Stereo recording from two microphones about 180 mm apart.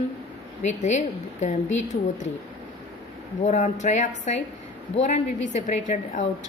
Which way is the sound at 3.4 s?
40° left (ahead or behind).